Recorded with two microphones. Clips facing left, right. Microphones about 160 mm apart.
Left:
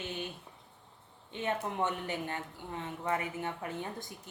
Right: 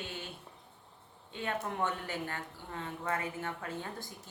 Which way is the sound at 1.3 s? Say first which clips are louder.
Left 2 dB; 20° left (ahead or behind).